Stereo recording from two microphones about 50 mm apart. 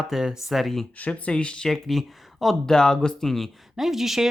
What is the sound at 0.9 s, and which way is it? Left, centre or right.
Speech, left.